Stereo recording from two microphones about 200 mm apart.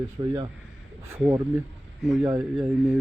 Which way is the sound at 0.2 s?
25° right (ahead or behind).